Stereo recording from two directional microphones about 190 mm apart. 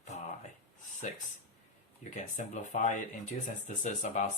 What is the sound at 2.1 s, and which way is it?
Speech, 40° left (ahead or behind).